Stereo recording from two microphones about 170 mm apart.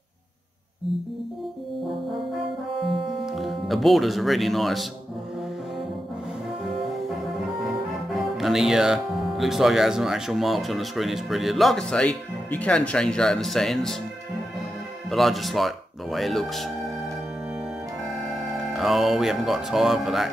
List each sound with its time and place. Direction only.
3.3 s speech: centre (ahead or behind)
7.6 s speech: centre (ahead or behind)
15.0 s speech: centre (ahead or behind)
18.7 s speech: centre (ahead or behind)